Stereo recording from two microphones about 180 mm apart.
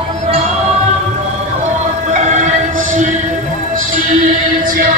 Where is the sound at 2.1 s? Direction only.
40° right (ahead or behind).